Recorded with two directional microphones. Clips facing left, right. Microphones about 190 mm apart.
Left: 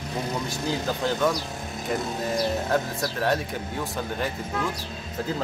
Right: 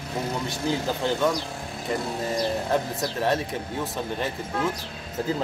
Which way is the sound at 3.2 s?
Centre (ahead or behind).